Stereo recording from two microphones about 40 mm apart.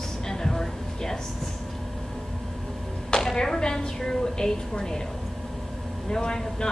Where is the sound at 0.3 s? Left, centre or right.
Centre.